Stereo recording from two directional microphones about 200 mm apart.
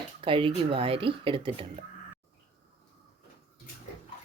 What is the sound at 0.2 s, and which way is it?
Speech, 25° right (ahead or behind).